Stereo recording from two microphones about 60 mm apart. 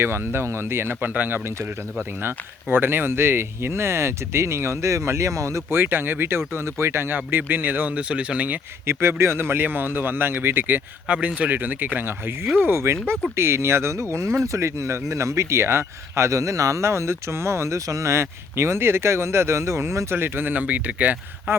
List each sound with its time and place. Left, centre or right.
0.0 s speech: right
1.1 s speech: right
5.7 s speech: right
8.9 s speech: right
11.1 s speech: right
20.1 s speech: right